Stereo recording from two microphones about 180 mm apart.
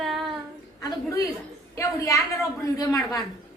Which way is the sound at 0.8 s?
20° left (ahead or behind).